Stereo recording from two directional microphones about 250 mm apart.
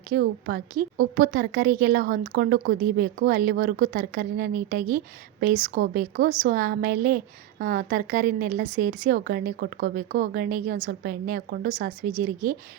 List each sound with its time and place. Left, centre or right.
0.1 s a woman's voice: right